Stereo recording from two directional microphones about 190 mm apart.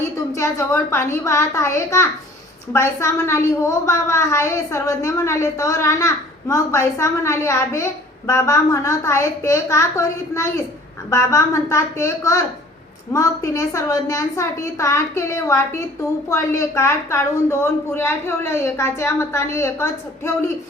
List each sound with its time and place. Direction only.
0.3 s a woman's voice: 15° left (ahead or behind)